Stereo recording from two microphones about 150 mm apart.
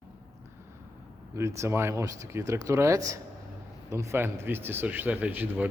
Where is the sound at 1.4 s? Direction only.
20° right (ahead or behind).